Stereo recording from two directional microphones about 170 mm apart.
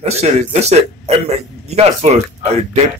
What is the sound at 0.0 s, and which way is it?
Speech, 40° right (ahead or behind).